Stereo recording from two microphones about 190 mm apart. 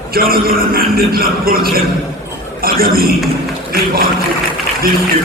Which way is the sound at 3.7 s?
50° right (ahead or behind).